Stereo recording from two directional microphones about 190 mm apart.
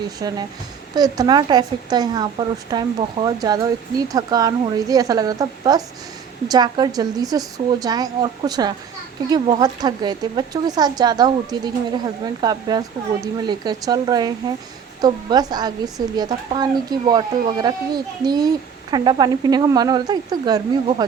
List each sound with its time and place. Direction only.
0.2 s a woman's voice: 20° right (ahead or behind)